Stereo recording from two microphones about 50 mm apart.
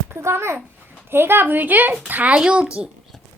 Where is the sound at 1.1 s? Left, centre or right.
Right.